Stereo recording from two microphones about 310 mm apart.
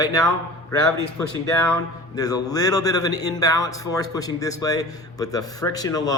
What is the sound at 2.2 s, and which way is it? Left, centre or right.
Speech, centre.